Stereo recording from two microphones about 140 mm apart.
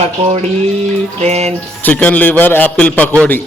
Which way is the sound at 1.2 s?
50° right (ahead or behind).